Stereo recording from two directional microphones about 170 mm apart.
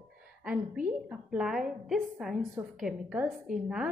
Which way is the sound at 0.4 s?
5° right (ahead or behind).